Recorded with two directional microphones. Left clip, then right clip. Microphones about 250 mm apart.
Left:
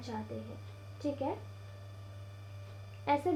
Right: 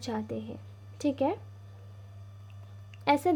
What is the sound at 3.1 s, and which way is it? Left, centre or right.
Speech, right.